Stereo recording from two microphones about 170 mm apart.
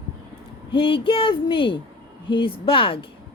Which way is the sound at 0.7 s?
30° left (ahead or behind).